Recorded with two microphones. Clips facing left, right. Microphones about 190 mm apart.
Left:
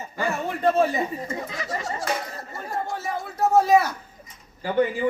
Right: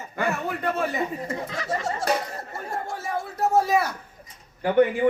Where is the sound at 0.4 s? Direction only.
30° left (ahead or behind).